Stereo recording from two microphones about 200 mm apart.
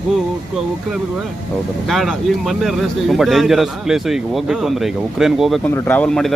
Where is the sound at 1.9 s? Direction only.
Centre (ahead or behind).